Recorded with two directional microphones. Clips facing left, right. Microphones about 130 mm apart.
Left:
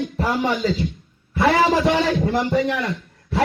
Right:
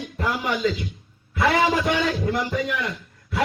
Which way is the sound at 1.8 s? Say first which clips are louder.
Left 4 dB; 45° left (ahead or behind).